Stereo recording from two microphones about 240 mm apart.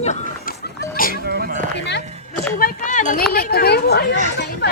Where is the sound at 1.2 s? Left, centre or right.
Right.